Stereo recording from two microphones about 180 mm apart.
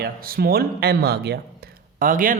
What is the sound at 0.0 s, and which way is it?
Speech, 55° right (ahead or behind).